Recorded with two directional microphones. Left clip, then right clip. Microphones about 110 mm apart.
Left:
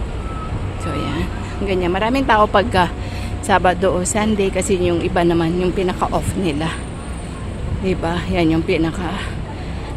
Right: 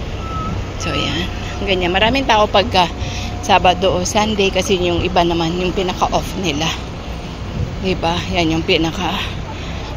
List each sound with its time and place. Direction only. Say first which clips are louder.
0.8 s speech: right 4 dB; 10° left (ahead or behind)
2.2 s speech: right 1 dB; 35° left (ahead or behind)
3.4 s a woman's voice: right 2 dB; 30° left (ahead or behind)
7.8 s speech: right 3 dB; 30° left (ahead or behind)
8.6 s speech: right 3 dB; 20° left (ahead or behind)